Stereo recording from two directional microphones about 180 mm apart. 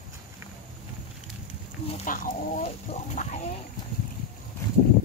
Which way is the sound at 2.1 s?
50° left (ahead or behind).